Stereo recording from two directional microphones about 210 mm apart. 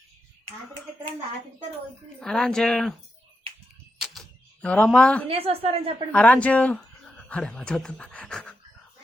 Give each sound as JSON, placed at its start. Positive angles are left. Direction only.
{"t": 2.2, "sound": "speech", "side_deg": 5}
{"t": 3.9, "sound": "a sound", "side_deg": 0}
{"t": 5.3, "sound": "a woman's voice", "side_deg": -30}
{"t": 6.1, "sound": "speech", "side_deg": 5}